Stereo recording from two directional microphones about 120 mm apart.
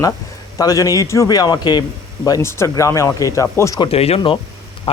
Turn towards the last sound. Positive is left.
turn(degrees=55)  # may be behind; listen again after turning